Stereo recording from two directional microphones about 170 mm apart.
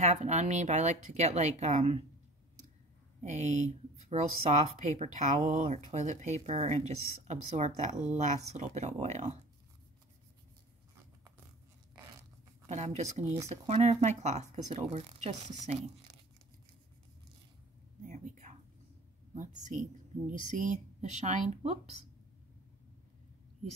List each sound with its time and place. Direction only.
0.0 s speech: 40° right (ahead or behind)
3.2 s speech: 45° right (ahead or behind)
12.6 s speech: 40° right (ahead or behind)
18.0 s whispering: 45° right (ahead or behind)
19.3 s speech: 50° right (ahead or behind)